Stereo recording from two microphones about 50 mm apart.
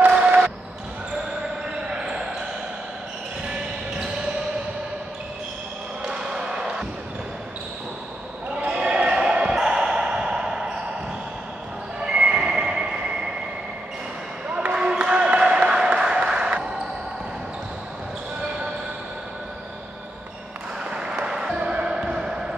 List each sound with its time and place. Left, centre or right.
1.9 s basketball bounce: centre
6.0 s basketball bounce: centre
8.7 s basketball bounce: centre
12.0 s train: centre
14.5 s a sound: centre
20.9 s basketball bounce: centre